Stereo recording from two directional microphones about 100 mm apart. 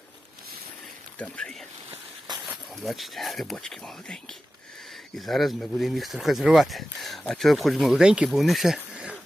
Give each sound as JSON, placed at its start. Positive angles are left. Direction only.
{"t": 1.2, "sound": "speech", "side_deg": 10}
{"t": 2.3, "sound": "a sound", "side_deg": -45}
{"t": 2.8, "sound": "speech", "side_deg": 0}